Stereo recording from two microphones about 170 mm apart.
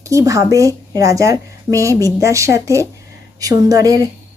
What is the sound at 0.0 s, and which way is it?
Speech, 20° right (ahead or behind).